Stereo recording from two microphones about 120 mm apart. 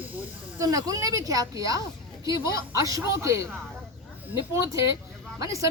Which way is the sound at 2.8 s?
25° right (ahead or behind).